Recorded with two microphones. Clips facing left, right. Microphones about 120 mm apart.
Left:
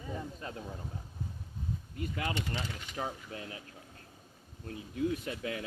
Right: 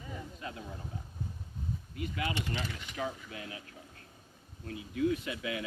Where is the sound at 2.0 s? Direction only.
35° left (ahead or behind).